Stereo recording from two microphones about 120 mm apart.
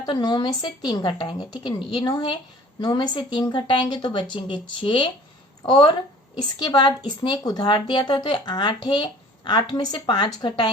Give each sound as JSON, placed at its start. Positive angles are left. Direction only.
{"t": 0.0, "sound": "speech", "side_deg": 35}